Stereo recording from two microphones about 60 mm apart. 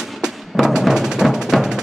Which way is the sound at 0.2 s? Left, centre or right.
Centre.